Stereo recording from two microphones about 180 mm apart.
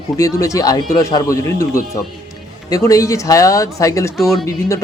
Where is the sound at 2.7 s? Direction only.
20° left (ahead or behind).